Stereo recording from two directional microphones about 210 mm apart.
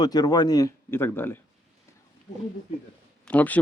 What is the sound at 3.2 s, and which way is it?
Speech, 5° left (ahead or behind).